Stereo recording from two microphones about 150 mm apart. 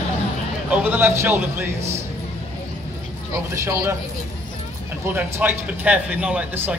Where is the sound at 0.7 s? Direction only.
10° right (ahead or behind).